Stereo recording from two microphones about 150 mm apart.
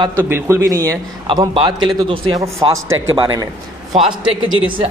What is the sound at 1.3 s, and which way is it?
A man's voice, 30° right (ahead or behind).